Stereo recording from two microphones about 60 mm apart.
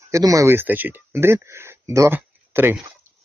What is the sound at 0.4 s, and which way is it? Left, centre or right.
Speech, right.